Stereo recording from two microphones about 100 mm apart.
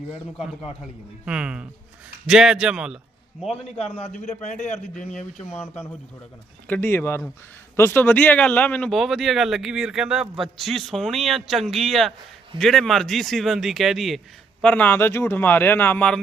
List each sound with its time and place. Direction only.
1.2 s a man's voice: 10° right (ahead or behind)
3.6 s a man's voice: 80° left
6.7 s speech: 20° left (ahead or behind)
8.9 s a man's voice: centre (ahead or behind)
14.6 s speech: 15° left (ahead or behind)